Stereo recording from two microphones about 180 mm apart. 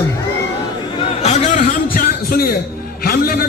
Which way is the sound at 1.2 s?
40° left (ahead or behind).